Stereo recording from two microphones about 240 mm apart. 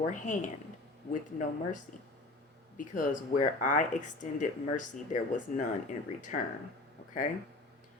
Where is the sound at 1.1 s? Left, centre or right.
Left.